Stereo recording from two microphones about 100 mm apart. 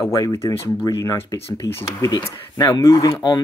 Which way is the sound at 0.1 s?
35° left (ahead or behind).